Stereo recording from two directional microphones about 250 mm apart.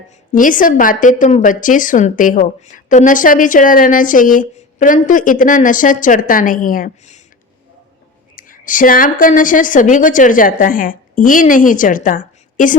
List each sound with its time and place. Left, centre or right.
0.3 s a woman's voice: left
8.4 s a woman's voice: left